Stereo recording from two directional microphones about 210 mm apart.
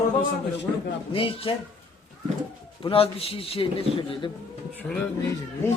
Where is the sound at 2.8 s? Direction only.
25° left (ahead or behind).